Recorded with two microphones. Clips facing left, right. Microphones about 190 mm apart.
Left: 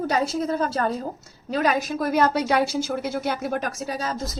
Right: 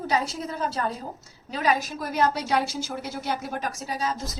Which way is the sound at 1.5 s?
55° left (ahead or behind).